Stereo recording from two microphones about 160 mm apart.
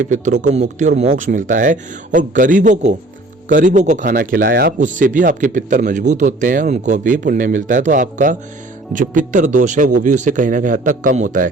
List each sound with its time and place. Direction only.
0.0 s a man's voice: 50° right (ahead or behind); by 4.7 s 70° right (ahead or behind)
4.8 s a man's voice: 55° right (ahead or behind)